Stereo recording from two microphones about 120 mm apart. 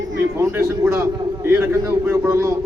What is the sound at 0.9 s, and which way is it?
A man's voice, 20° right (ahead or behind).